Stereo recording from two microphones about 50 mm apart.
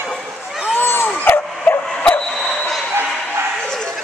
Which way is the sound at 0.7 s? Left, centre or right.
Left.